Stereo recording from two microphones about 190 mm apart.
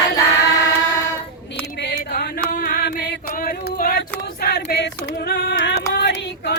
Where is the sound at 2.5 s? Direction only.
55° left (ahead or behind).